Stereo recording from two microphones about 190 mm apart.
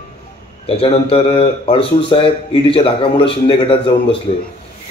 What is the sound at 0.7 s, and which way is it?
A man's voice, 30° left (ahead or behind).